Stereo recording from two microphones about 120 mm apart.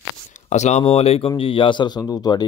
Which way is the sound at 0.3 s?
80° left.